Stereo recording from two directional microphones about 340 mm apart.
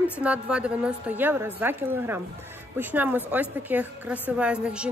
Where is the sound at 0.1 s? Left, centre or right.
Centre.